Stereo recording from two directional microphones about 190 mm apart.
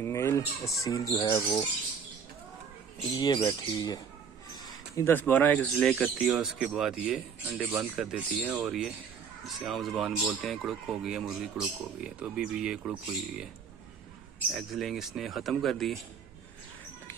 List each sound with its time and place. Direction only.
0.0 s speech: 15° left (ahead or behind)
3.2 s speech: 25° left (ahead or behind); by 12.9 s 5° right (ahead or behind)
14.5 s speech: centre (ahead or behind)